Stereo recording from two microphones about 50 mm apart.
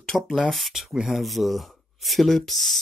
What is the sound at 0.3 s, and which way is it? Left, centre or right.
Speech, centre.